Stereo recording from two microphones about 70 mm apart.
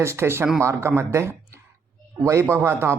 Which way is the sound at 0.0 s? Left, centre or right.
Right.